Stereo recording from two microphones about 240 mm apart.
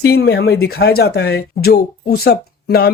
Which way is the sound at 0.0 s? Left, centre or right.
Left.